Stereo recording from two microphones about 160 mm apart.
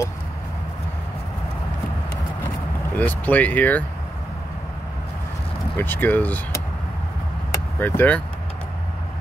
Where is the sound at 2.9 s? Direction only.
10° left (ahead or behind).